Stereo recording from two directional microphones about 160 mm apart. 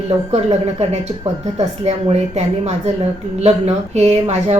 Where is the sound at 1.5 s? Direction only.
40° right (ahead or behind).